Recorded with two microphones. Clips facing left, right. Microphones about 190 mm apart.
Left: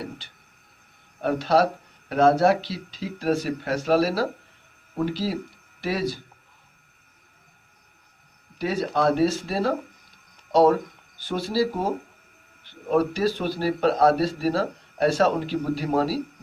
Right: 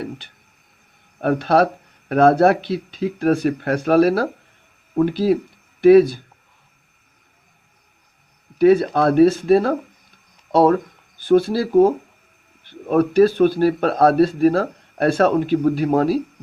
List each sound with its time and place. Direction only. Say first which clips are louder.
1.2 s speech: right 4 dB; 55° right (ahead or behind)
8.5 s speech: right 11 dB; 55° right (ahead or behind)
12.9 s speech: right 7 dB; 55° right (ahead or behind)